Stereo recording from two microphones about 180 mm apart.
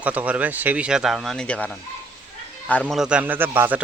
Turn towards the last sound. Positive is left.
turn(degrees=-10)  # may be behind; listen again after turning